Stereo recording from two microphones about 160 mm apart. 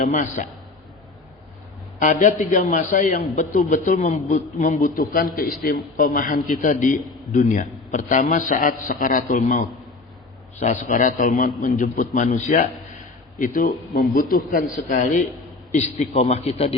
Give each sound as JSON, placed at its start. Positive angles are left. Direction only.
{"t": 0.1, "sound": "speech", "side_deg": 55}
{"t": 2.0, "sound": "a man's voice", "side_deg": 55}